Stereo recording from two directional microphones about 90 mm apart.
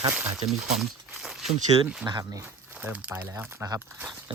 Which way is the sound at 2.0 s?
50° right (ahead or behind).